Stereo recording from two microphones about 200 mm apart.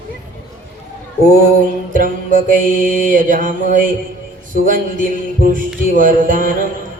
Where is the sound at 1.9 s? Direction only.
45° right (ahead or behind).